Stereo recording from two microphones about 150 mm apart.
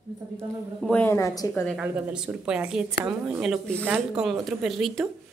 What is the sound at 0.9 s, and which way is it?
Speech, 15° left (ahead or behind).